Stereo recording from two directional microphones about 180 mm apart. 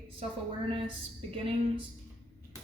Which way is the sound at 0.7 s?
30° right (ahead or behind).